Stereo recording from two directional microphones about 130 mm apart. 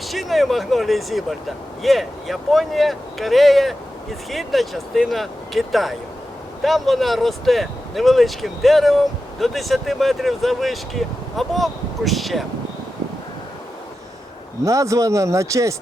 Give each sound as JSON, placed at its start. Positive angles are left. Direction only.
{"t": 0.1, "sound": "speech", "side_deg": 0}
{"t": 14.6, "sound": "speech", "side_deg": -25}